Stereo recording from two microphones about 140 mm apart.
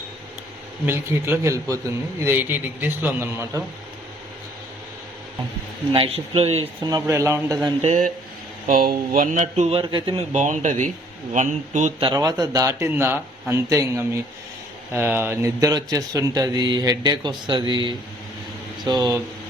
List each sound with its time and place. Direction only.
0.9 s a man's voice: 15° right (ahead or behind)
5.9 s a man's voice: 40° right (ahead or behind)
6.8 s speech: 25° right (ahead or behind)
7.8 s a man's voice: 50° right (ahead or behind)
8.6 s speech: 90° right; by 9.8 s 50° right (ahead or behind)
9.8 s speech: 35° right (ahead or behind)
10.3 s speech: 60° right (ahead or behind)
11.9 s speech: 30° right (ahead or behind)